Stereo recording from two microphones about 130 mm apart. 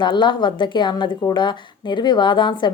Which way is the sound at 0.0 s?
35° left (ahead or behind).